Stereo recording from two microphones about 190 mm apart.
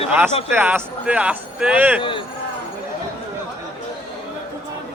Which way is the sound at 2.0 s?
25° left (ahead or behind).